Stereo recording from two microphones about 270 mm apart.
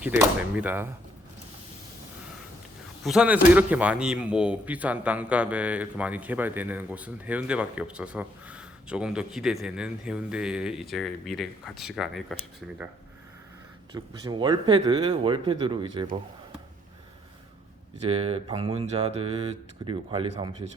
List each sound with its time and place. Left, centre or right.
0.0 s speech: centre
3.0 s speech: centre
13.9 s speech: centre
18.1 s speech: right